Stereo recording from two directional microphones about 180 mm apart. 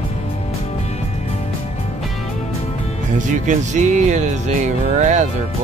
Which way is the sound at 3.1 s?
45° right (ahead or behind).